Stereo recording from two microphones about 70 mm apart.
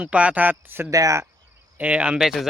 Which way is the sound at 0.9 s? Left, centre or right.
Right.